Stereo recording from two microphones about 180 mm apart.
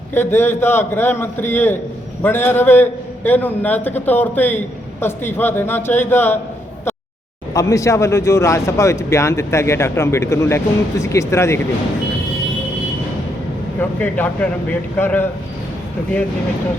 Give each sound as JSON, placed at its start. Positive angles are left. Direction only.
{"t": 0.1, "sound": "a man's voice", "side_deg": 10}
{"t": 7.5, "sound": "a man's voice", "side_deg": 15}
{"t": 13.7, "sound": "a man's voice", "side_deg": 10}